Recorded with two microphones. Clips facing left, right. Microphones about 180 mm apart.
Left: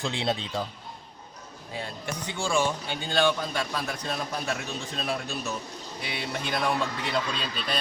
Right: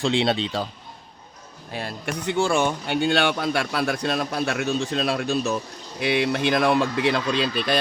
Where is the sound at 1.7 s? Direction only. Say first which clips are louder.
Right 5 dB; 75° right (ahead or behind).